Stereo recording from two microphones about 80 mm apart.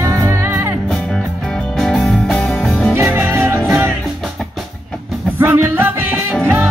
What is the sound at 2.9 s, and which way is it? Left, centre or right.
Music, right.